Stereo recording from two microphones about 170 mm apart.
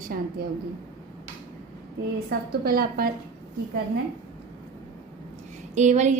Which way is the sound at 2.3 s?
65° right (ahead or behind).